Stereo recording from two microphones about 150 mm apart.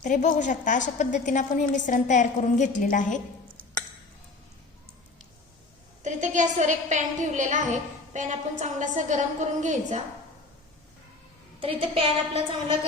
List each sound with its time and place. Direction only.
0.0 s a woman's voice: 55° left (ahead or behind)
6.0 s a woman's voice: 55° right (ahead or behind)
11.6 s a woman's voice: 40° right (ahead or behind)